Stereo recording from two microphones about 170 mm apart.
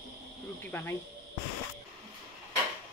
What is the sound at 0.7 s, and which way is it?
Speech, 15° left (ahead or behind).